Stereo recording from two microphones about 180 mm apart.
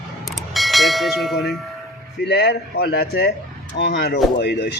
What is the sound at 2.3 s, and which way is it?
A man's voice, 65° left (ahead or behind).